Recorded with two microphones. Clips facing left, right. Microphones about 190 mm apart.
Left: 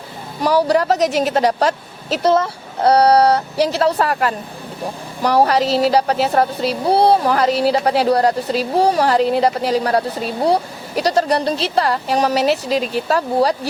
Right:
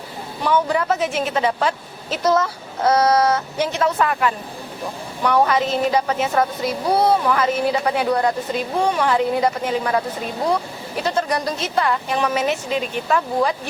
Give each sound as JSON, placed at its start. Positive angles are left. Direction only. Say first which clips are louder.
{"t": 0.4, "sound": "a woman's voice", "louder": "left 4 dB", "side_deg": 40}
{"t": 2.2, "sound": "a woman's voice", "louder": "left 3 dB", "side_deg": 30}